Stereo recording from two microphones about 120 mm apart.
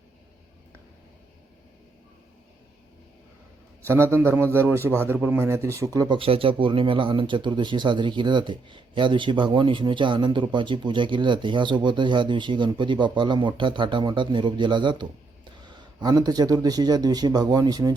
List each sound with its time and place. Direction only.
3.8 s a man's voice: 20° right (ahead or behind)
6.1 s speech: 50° right (ahead or behind); by 17.9 s 30° right (ahead or behind)